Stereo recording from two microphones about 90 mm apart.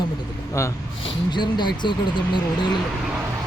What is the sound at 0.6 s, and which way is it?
Speech, 30° left (ahead or behind).